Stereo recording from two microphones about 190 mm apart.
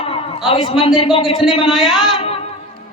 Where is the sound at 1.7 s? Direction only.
Centre (ahead or behind).